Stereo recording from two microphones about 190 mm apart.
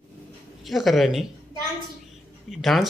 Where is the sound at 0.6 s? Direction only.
Centre (ahead or behind).